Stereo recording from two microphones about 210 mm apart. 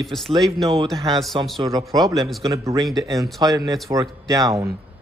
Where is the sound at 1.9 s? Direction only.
20° right (ahead or behind).